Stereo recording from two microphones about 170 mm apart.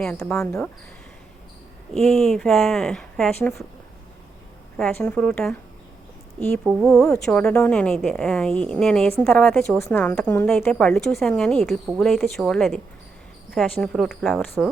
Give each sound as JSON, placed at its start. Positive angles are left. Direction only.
{"t": 0.3, "sound": "speech", "side_deg": 15}
{"t": 1.9, "sound": "a woman's voice", "side_deg": 5}
{"t": 4.8, "sound": "a woman's voice", "side_deg": 10}
{"t": 6.8, "sound": "a woman's voice", "side_deg": 5}